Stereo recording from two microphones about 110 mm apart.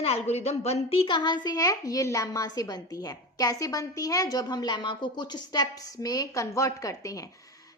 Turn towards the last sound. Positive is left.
turn(degrees=30)  # may be behind; listen again after turning